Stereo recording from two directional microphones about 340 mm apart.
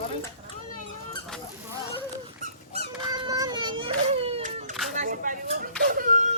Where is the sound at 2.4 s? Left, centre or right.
Centre.